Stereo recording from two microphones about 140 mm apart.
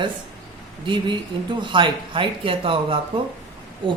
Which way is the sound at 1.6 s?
35° right (ahead or behind).